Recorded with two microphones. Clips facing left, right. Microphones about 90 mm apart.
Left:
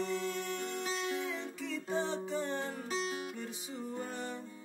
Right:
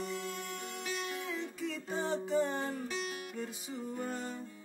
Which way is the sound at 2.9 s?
30° left (ahead or behind).